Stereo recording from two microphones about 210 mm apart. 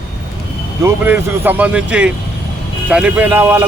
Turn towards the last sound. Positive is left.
turn(degrees=-10)  # may be behind; listen again after turning